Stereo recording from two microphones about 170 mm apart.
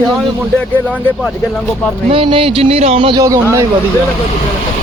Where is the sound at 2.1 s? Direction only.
30° right (ahead or behind).